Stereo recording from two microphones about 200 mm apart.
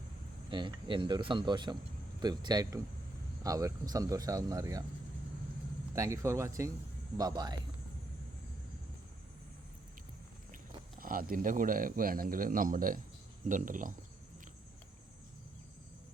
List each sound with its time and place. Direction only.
0.5 s speech: 25° right (ahead or behind)
5.9 s speech: 15° right (ahead or behind)
11.0 s speech: 45° right (ahead or behind)